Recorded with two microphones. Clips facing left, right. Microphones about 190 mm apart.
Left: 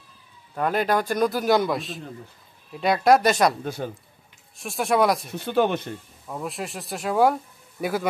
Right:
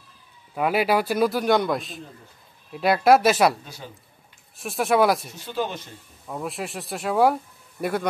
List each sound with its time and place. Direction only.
0.6 s a man's voice: 5° right (ahead or behind)
3.6 s a man's voice: 55° left (ahead or behind)
4.6 s a man's voice: centre (ahead or behind)
5.3 s speech: 60° left (ahead or behind)
6.2 s a man's voice: centre (ahead or behind)